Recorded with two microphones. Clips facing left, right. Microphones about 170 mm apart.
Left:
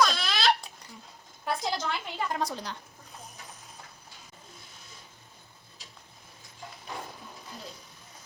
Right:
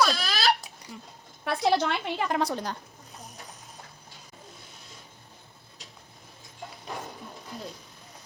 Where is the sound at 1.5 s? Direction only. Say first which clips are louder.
Right 6 dB; 65° right (ahead or behind).